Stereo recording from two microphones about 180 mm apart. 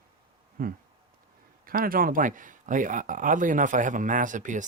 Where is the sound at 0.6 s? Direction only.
55° right (ahead or behind).